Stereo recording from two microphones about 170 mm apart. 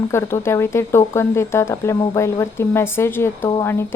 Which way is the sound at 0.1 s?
15° left (ahead or behind).